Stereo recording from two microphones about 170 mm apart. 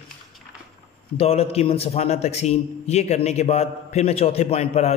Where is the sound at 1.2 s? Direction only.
35° left (ahead or behind).